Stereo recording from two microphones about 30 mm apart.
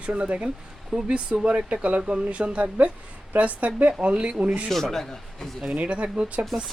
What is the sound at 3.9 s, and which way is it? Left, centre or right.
Speech, right.